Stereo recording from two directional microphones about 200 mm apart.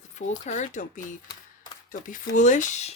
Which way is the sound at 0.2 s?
35° left (ahead or behind).